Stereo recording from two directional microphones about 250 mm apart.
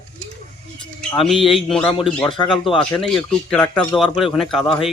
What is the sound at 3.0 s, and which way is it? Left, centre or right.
Speech, centre.